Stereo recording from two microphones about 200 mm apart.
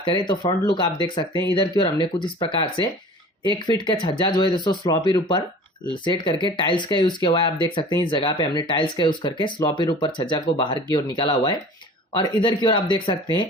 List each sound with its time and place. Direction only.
0.0 s speech: 25° left (ahead or behind)